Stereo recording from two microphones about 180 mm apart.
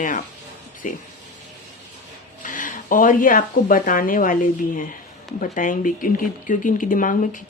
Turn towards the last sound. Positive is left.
turn(degrees=45)  # may be behind; listen again after turning